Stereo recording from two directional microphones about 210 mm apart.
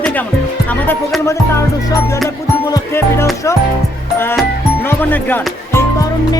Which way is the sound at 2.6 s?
15° left (ahead or behind).